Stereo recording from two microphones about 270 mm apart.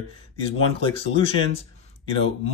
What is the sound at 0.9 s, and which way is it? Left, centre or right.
Speech, left.